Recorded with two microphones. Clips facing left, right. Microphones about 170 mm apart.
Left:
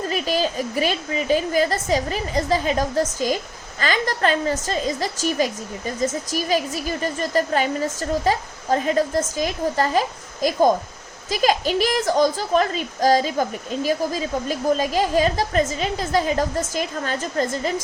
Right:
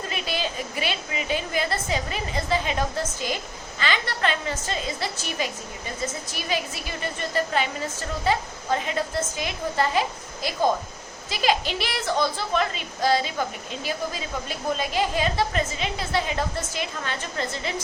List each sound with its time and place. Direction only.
0.1 s a woman's voice: 40° left (ahead or behind)